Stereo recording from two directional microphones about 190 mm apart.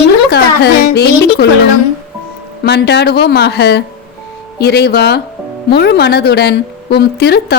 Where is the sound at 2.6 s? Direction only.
60° left (ahead or behind).